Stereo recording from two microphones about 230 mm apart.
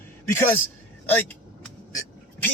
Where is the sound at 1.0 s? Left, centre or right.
Centre.